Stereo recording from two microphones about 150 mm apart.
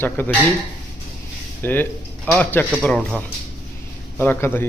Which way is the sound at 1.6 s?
10° left (ahead or behind).